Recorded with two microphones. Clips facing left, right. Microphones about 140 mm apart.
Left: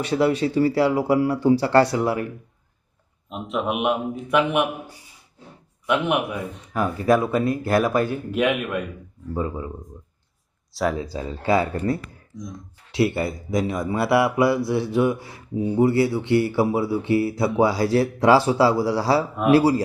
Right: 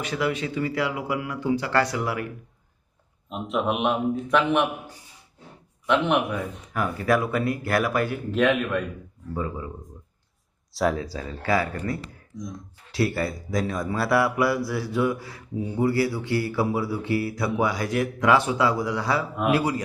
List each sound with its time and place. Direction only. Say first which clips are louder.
0.0 s speech: left 6 dB; 30° left (ahead or behind)
3.2 s a man's voice: even; centre (ahead or behind)
6.7 s speech: left 4 dB; 25° left (ahead or behind)
8.3 s a man's voice: right 4 dB; 10° left (ahead or behind)
9.3 s speech: left 3 dB; 25° left (ahead or behind)
10.8 s speech: even; centre (ahead or behind)
11.0 s speech: left 4 dB; 20° left (ahead or behind)
12.3 s speech: even; centre (ahead or behind)
12.9 s speech: left 3 dB; 25° left (ahead or behind)